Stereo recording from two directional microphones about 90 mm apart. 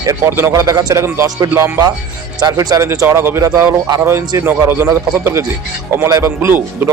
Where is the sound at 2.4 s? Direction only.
45° right (ahead or behind).